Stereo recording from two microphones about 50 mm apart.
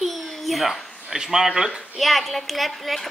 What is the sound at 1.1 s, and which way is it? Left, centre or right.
A woman's voice, centre.